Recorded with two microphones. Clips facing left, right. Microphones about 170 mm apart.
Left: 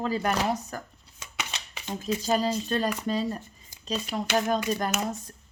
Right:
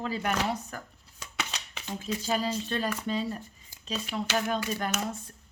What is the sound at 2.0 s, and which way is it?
Speech, 40° left (ahead or behind).